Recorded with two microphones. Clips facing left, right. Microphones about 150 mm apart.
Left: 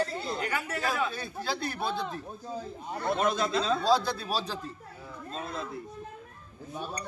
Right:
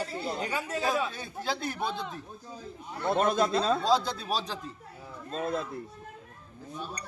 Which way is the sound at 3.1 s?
45° right (ahead or behind).